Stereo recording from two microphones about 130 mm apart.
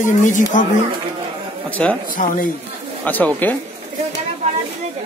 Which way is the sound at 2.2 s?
90° left.